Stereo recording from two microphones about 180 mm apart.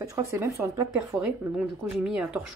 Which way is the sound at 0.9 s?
5° right (ahead or behind).